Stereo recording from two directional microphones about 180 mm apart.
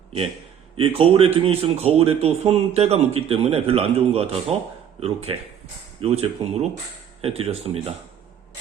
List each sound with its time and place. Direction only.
0.8 s speech: 30° right (ahead or behind)